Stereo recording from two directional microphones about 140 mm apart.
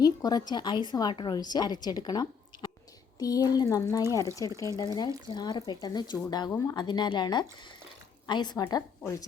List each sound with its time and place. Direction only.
0.0 s a woman's voice: 25° left (ahead or behind)